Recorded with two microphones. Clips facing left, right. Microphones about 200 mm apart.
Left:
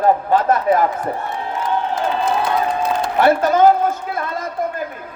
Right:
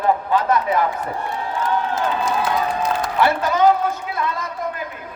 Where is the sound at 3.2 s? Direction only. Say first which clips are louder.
Left 5 dB; 50° left (ahead or behind).